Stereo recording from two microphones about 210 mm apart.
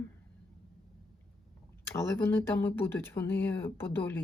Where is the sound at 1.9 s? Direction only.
10° left (ahead or behind).